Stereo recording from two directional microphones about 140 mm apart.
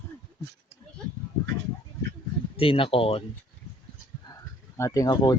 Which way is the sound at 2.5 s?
40° left (ahead or behind).